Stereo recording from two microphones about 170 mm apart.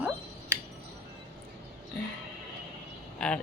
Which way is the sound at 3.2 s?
5° left (ahead or behind).